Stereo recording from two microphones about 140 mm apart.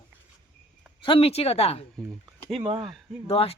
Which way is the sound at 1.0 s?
40° left (ahead or behind).